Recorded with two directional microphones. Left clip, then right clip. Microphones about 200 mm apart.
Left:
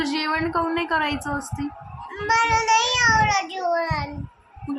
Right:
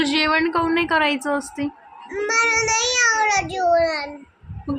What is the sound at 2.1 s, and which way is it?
Speech, 5° left (ahead or behind).